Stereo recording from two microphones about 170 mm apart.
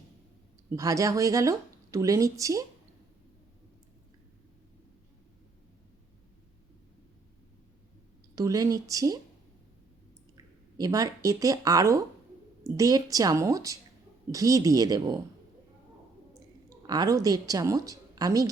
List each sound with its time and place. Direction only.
0.8 s a woman's voice: 20° right (ahead or behind)
8.4 s a woman's voice: 20° right (ahead or behind)
10.3 s a woman's voice: 20° right (ahead or behind)
16.3 s a woman's voice: 20° right (ahead or behind)